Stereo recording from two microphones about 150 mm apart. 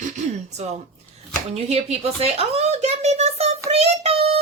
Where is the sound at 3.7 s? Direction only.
40° right (ahead or behind).